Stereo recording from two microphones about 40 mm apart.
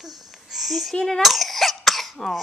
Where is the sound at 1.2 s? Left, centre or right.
Centre.